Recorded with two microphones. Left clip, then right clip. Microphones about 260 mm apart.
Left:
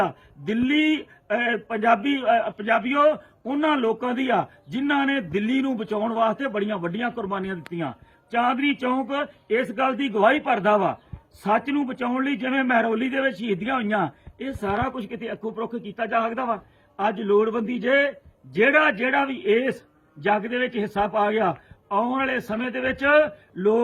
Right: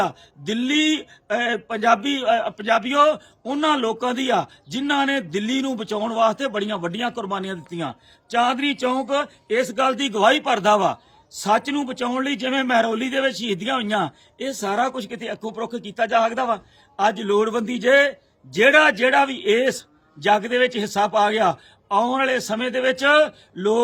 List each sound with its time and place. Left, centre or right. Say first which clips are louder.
0.0 s a man's voice: right 1 dB; centre